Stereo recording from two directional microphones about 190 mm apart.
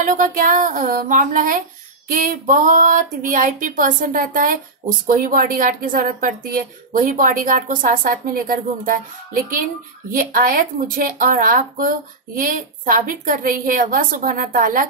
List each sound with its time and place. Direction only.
0.0 s a woman's voice: 45° right (ahead or behind)